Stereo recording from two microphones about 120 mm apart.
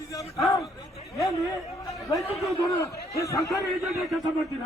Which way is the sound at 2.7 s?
25° left (ahead or behind).